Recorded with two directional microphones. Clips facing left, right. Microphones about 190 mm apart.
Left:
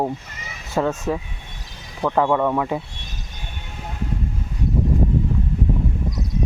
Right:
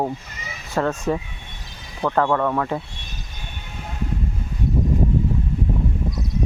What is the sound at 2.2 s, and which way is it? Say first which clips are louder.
Speech: left 1 dB; 10° left (ahead or behind).